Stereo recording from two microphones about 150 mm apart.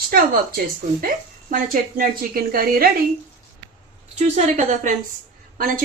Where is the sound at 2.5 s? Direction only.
80° right.